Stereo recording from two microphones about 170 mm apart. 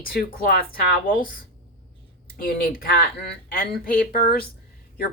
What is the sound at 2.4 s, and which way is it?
Speech, 60° left (ahead or behind).